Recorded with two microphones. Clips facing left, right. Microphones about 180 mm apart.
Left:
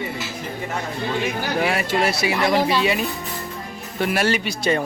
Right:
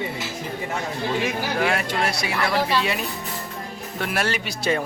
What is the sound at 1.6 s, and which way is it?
Speech, 5° left (ahead or behind).